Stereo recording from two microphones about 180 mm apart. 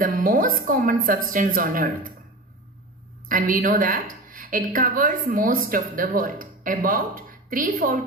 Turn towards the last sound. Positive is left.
turn(degrees=-50)  # may be behind; listen again after turning